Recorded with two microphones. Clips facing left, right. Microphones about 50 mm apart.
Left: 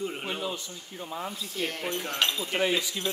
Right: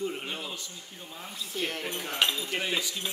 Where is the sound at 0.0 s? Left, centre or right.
Centre.